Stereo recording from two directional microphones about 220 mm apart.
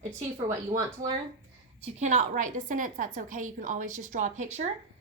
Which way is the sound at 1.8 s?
30° right (ahead or behind).